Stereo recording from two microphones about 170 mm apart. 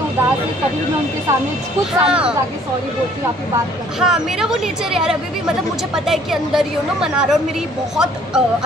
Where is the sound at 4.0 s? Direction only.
5° right (ahead or behind).